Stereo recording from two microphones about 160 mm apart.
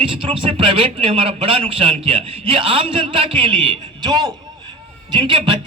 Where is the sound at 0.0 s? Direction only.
35° right (ahead or behind).